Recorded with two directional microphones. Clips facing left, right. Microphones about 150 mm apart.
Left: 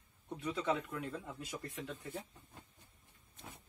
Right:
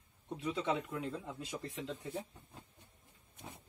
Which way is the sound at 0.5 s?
20° right (ahead or behind).